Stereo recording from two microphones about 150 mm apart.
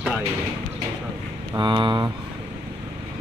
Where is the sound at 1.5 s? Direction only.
30° right (ahead or behind).